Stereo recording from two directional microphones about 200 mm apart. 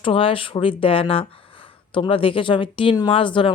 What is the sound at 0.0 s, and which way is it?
Speech, 25° left (ahead or behind).